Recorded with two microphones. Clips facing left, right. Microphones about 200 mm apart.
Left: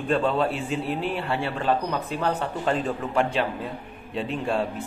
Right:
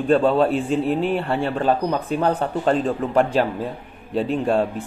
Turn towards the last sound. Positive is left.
turn(degrees=-40)  # may be behind; listen again after turning